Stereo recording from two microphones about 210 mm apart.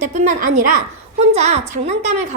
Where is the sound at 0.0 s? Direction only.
35° right (ahead or behind).